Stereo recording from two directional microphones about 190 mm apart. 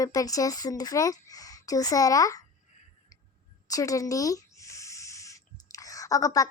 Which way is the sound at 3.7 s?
15° left (ahead or behind).